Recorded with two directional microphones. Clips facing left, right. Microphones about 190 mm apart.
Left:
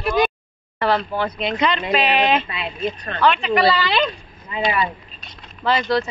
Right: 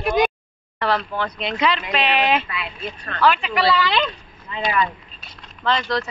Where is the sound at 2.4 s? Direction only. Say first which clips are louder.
Left 5 dB; 25° left (ahead or behind).